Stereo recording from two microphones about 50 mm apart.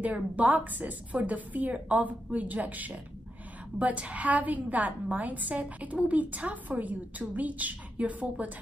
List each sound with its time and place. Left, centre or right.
0.0 s a woman's voice: right